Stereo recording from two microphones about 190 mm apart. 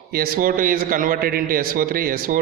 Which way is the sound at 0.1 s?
50° right (ahead or behind).